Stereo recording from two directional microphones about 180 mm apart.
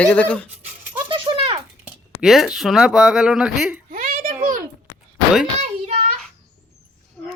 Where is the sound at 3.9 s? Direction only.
50° right (ahead or behind).